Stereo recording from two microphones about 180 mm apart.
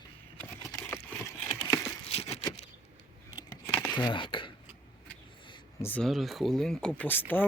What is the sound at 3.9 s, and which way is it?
Speech, 25° left (ahead or behind).